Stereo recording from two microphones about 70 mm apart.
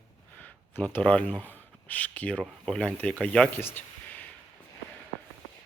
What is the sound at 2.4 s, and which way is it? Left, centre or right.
Speech, centre.